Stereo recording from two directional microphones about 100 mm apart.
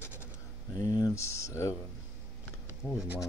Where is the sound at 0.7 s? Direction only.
40° left (ahead or behind).